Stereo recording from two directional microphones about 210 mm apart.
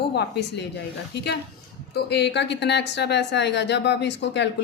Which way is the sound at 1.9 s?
50° left (ahead or behind).